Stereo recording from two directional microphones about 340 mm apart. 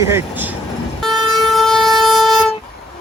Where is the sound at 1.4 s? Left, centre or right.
Centre.